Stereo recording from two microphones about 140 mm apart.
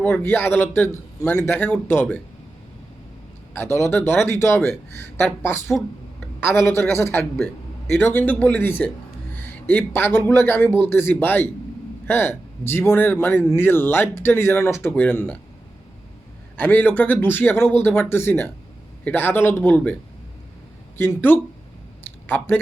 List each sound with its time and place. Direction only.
0.0 s a man's voice: 10° left (ahead or behind)
3.5 s a man's voice: 15° left (ahead or behind)
16.6 s a man's voice: 15° left (ahead or behind)
21.0 s a man's voice: 15° left (ahead or behind)